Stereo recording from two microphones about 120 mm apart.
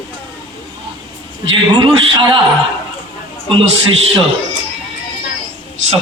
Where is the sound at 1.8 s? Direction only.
45° right (ahead or behind).